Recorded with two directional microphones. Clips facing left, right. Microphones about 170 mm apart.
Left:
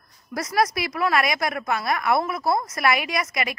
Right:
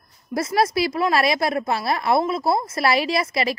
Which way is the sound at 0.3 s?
25° right (ahead or behind).